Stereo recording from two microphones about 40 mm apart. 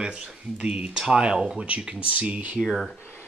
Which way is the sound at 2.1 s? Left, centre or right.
Right.